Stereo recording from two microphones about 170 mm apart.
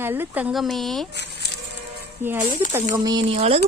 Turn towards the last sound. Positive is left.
turn(degrees=-40)  # may be behind; listen again after turning